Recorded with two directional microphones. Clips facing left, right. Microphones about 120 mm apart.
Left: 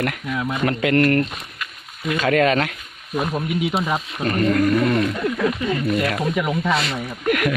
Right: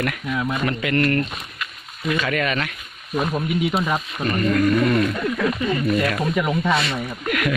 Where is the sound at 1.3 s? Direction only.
Centre (ahead or behind).